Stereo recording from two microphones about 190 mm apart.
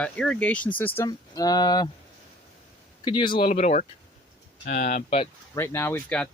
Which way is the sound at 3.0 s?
25° left (ahead or behind).